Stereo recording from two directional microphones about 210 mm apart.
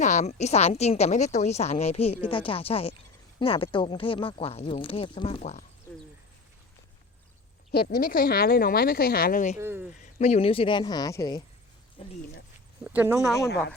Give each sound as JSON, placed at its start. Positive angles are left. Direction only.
{"t": 0.0, "sound": "a woman's voice", "side_deg": 35}
{"t": 7.7, "sound": "speech", "side_deg": 50}
{"t": 9.6, "sound": "speech", "side_deg": -10}
{"t": 10.2, "sound": "speech", "side_deg": 30}
{"t": 12.0, "sound": "speech", "side_deg": 25}
{"t": 12.8, "sound": "speech", "side_deg": -10}